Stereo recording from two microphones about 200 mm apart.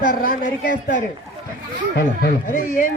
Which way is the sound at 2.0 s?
45° left (ahead or behind).